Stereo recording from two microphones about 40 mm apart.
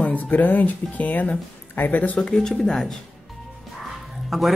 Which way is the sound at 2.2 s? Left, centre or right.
Centre.